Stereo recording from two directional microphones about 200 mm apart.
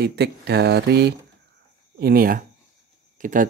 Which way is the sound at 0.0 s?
55° right (ahead or behind).